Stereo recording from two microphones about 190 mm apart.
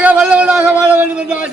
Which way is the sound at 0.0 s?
10° right (ahead or behind).